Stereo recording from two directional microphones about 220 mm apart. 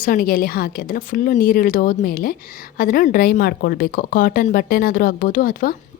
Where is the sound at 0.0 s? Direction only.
40° left (ahead or behind).